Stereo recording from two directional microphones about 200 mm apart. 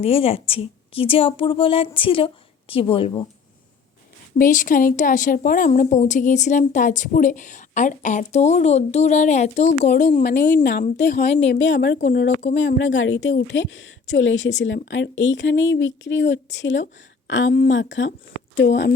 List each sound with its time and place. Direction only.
0.0 s a woman's voice: 30° left (ahead or behind)
4.4 s a woman's voice: 40° left (ahead or behind)
10.2 s speech: 55° left (ahead or behind)